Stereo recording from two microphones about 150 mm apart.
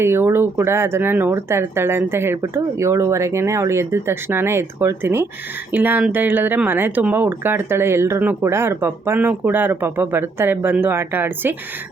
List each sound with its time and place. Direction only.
0.0 s speech: 15° right (ahead or behind)